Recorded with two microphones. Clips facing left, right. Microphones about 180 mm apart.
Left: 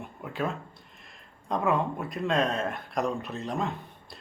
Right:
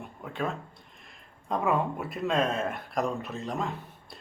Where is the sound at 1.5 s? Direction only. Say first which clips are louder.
Left 1 dB; 5° right (ahead or behind).